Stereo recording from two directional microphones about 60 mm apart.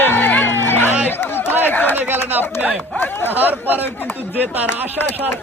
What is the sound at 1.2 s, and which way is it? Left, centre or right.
Chatter, left.